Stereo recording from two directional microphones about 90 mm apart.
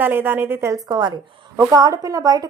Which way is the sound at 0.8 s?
50° right (ahead or behind).